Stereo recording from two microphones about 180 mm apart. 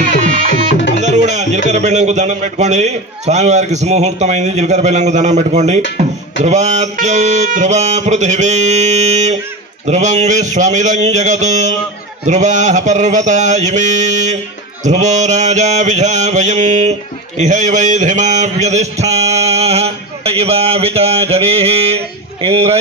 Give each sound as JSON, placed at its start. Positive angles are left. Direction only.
{"t": 1.0, "sound": "music", "side_deg": -40}
{"t": 1.7, "sound": "mantra", "side_deg": -40}